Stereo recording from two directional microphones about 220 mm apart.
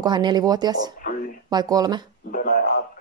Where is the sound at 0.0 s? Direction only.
20° right (ahead or behind).